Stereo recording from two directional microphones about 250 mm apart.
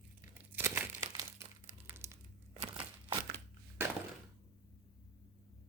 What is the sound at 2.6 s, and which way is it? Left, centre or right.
Crushing, right.